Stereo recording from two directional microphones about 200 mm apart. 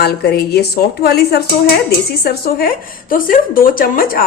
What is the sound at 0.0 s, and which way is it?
A woman's voice, 50° left (ahead or behind).